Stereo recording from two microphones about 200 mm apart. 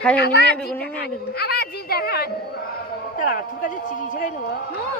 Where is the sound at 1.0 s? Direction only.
50° left (ahead or behind).